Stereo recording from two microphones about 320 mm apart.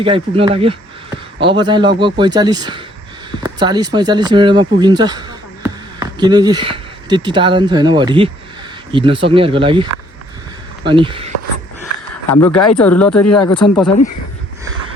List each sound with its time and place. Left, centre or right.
0.0 s speech: centre
3.4 s a sound: centre
3.9 s speech: centre
12.3 s speech: centre